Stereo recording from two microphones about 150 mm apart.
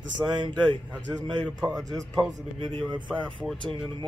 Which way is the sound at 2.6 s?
35° right (ahead or behind).